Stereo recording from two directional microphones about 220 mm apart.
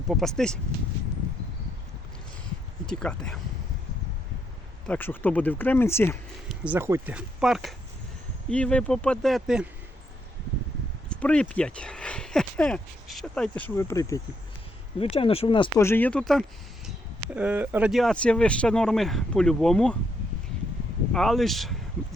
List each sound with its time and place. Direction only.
0.1 s speech: centre (ahead or behind)
2.8 s speech: 5° left (ahead or behind)
4.9 s speech: 10° left (ahead or behind)
6.5 s speech: 10° right (ahead or behind)
11.1 s speech: 5° left (ahead or behind)
14.9 s speech: 25° left (ahead or behind)
15.8 s speech: 10° left (ahead or behind)
17.3 s speech: 5° right (ahead or behind)
21.1 s speech: centre (ahead or behind)